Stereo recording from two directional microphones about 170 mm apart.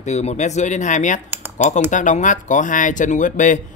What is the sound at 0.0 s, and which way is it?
Speech, 40° left (ahead or behind).